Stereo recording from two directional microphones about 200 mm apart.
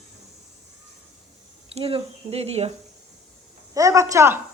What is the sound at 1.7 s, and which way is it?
Speech, 30° right (ahead or behind).